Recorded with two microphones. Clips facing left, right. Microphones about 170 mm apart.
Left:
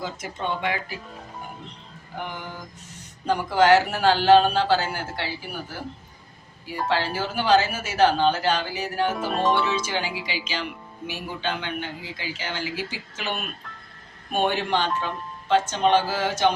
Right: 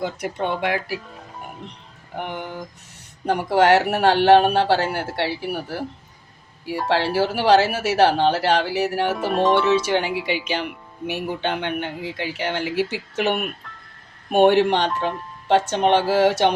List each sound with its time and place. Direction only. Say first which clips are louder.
0.0 s speech: right 5 dB; 65° right (ahead or behind)
3.2 s a man's voice: right 2 dB; 65° right (ahead or behind)
6.8 s a man's voice: right 5 dB; 75° right (ahead or behind)
9.1 s speech: right 4 dB; centre (ahead or behind)
9.6 s a man's voice: right 8 dB; 65° right (ahead or behind)